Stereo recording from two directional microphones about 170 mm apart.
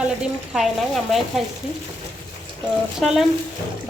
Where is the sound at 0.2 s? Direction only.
Centre (ahead or behind).